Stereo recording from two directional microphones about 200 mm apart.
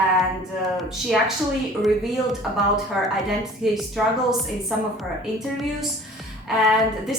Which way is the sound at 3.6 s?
Centre (ahead or behind).